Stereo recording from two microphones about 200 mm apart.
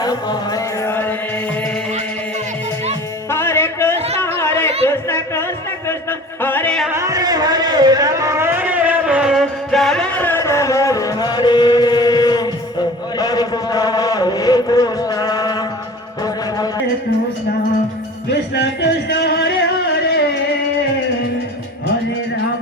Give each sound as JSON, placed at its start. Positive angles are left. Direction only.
{"t": 0.0, "sound": "music", "side_deg": 20}
{"t": 3.2, "sound": "music", "side_deg": 10}
{"t": 4.2, "sound": "chatter", "side_deg": 10}
{"t": 4.9, "sound": "music", "side_deg": 15}
{"t": 5.9, "sound": "a sound", "side_deg": 10}
{"t": 6.9, "sound": "a sound", "side_deg": -15}
{"t": 13.1, "sound": "chant", "side_deg": 20}
{"t": 18.3, "sound": "music", "side_deg": 55}